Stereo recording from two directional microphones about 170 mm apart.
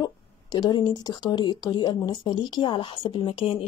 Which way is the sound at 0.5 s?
25° left (ahead or behind).